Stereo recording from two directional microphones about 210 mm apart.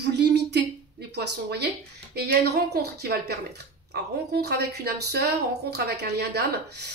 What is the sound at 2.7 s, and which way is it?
A woman's voice, 50° right (ahead or behind).